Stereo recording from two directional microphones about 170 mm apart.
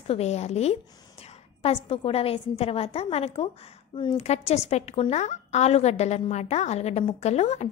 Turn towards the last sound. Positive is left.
turn(degrees=40)  # may be behind; listen again after turning